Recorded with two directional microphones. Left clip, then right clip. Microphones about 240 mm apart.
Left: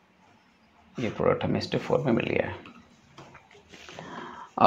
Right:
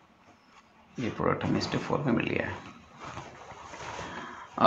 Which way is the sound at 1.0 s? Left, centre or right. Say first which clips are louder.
Left 4 dB; left.